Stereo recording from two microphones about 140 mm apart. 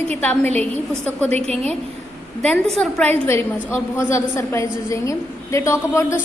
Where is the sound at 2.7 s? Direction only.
10° left (ahead or behind).